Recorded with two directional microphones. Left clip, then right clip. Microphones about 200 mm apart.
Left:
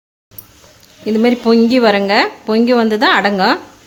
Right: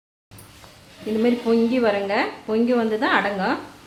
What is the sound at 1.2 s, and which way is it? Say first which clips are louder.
A woman's voice: left 8 dB; 55° left (ahead or behind).